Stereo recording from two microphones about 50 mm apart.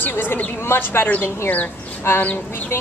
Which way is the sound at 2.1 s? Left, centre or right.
Left.